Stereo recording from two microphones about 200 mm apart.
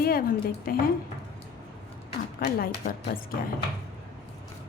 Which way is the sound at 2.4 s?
45° left (ahead or behind).